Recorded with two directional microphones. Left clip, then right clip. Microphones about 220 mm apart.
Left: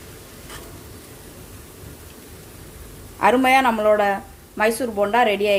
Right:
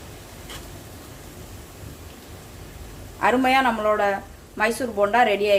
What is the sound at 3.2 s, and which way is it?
Speech, 25° left (ahead or behind).